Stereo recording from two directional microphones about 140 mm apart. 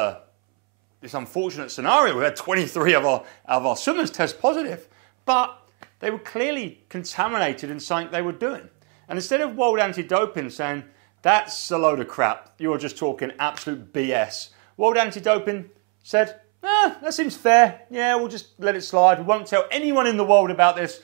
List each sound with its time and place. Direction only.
1.1 s speech: 20° right (ahead or behind)